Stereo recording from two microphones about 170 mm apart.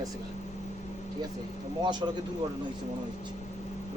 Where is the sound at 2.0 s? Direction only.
25° right (ahead or behind).